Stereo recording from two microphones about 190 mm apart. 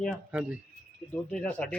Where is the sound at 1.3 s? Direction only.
10° left (ahead or behind).